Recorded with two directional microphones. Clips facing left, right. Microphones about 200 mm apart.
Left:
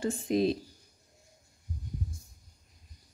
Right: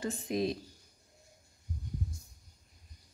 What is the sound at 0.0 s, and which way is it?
Speech, 30° left (ahead or behind).